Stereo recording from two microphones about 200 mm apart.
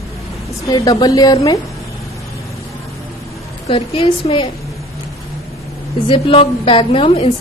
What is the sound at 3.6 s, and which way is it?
Speech, 30° left (ahead or behind).